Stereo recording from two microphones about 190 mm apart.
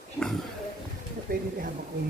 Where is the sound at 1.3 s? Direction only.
50° right (ahead or behind).